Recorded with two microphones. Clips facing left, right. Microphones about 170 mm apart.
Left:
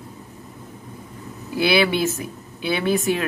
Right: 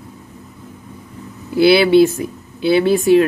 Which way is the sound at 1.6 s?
30° right (ahead or behind).